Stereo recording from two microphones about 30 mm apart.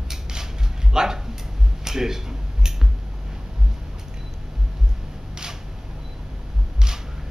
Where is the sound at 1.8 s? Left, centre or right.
Centre.